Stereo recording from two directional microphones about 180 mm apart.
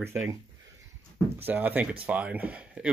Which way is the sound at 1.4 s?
10° right (ahead or behind).